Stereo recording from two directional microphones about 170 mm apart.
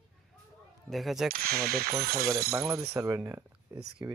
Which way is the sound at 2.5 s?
20° right (ahead or behind).